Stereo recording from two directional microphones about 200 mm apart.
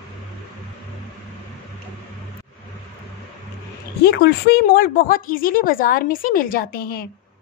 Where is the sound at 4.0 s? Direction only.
55° left (ahead or behind).